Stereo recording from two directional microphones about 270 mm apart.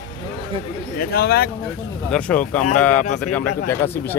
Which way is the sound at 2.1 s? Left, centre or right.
Centre.